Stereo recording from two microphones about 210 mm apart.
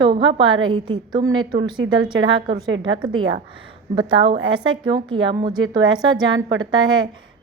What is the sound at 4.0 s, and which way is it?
A woman's voice, 25° right (ahead or behind).